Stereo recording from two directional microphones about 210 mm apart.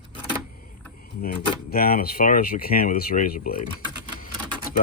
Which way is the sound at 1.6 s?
45° left (ahead or behind).